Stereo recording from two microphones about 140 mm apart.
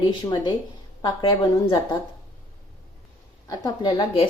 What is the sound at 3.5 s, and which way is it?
Speech, 30° left (ahead or behind).